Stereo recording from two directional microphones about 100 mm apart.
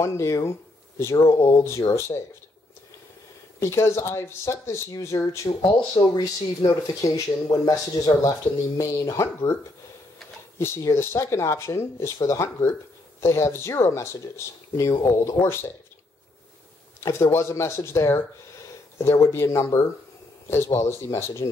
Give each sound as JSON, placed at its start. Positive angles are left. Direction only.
{"t": 0.0, "sound": "speech", "side_deg": 30}
{"t": 3.5, "sound": "speech", "side_deg": 30}
{"t": 10.6, "sound": "speech", "side_deg": 30}
{"t": 15.4, "sound": "speech", "side_deg": 5}
{"t": 17.0, "sound": "speech", "side_deg": 25}